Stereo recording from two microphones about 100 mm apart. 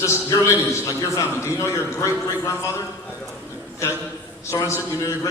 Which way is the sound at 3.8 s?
30° left (ahead or behind).